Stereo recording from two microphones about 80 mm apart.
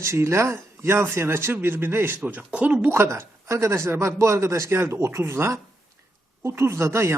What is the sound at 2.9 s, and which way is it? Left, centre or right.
A man's voice, right.